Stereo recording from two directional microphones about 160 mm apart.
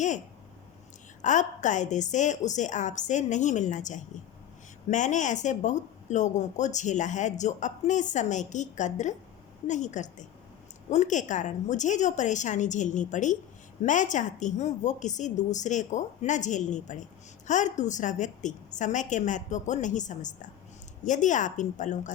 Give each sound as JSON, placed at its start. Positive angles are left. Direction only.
{"t": 1.2, "sound": "a woman's voice", "side_deg": 50}